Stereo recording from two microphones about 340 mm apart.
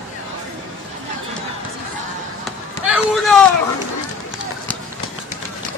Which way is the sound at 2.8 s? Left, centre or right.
Centre.